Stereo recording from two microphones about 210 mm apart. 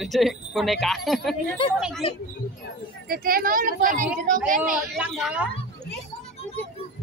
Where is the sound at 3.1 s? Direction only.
45° right (ahead or behind).